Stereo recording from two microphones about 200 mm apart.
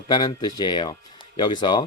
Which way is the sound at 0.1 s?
20° left (ahead or behind).